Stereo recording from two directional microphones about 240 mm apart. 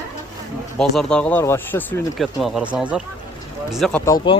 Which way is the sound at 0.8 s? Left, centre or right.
Centre.